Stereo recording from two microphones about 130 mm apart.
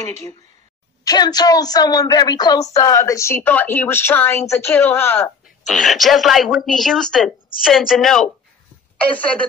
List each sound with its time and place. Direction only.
1.0 s a woman's voice: 30° left (ahead or behind)
5.7 s a woman's voice: centre (ahead or behind)